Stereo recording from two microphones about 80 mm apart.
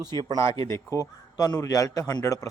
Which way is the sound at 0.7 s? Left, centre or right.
Left.